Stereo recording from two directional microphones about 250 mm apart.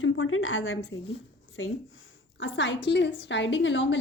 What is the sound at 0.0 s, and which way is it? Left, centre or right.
A woman's voice, left.